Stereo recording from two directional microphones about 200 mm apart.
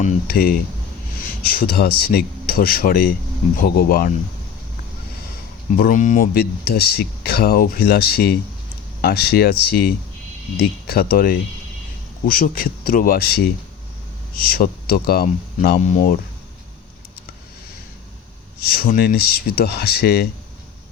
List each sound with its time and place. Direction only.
0.0 s speech: 45° left (ahead or behind)
5.7 s speech: 40° left (ahead or behind)
18.6 s speech: 50° left (ahead or behind)